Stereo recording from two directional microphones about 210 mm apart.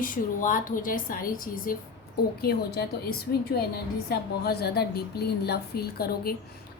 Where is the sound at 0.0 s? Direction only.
40° left (ahead or behind).